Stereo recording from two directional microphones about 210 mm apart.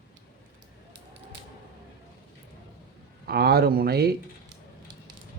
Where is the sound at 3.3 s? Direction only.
50° right (ahead or behind).